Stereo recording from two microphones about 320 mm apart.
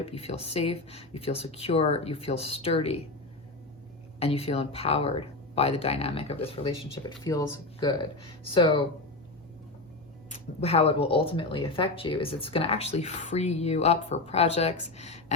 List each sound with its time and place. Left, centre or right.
0.0 s speech: centre
4.2 s speech: centre
10.2 s speech: centre